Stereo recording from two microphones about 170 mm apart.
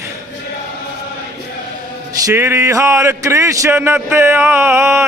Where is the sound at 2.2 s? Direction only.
15° right (ahead or behind).